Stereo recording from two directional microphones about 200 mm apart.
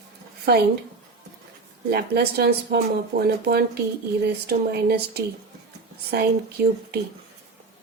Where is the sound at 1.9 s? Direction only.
55° right (ahead or behind).